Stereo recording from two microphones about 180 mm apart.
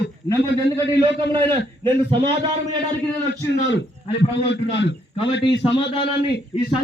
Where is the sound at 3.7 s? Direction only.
80° left.